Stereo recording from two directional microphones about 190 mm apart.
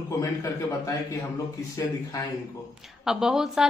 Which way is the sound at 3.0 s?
5° right (ahead or behind).